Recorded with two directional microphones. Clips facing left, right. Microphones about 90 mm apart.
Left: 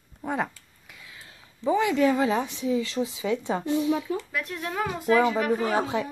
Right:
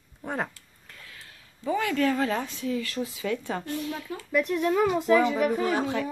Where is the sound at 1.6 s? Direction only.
20° left (ahead or behind).